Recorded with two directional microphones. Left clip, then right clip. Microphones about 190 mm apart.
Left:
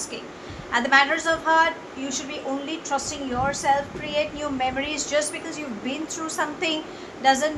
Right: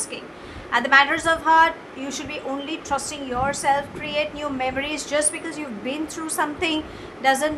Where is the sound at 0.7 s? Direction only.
30° right (ahead or behind).